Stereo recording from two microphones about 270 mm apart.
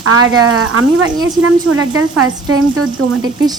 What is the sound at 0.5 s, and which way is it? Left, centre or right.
A woman's voice, right.